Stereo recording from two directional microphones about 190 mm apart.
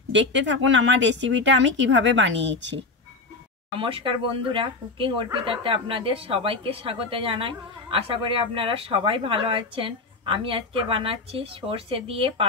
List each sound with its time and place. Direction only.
0.1 s speech: 70° right (ahead or behind)
3.7 s speech: 25° right (ahead or behind)